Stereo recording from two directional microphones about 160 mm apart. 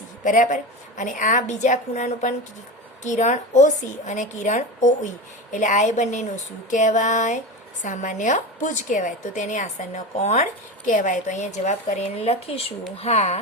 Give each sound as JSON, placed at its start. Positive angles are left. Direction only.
{"t": 0.3, "sound": "speech", "side_deg": 55}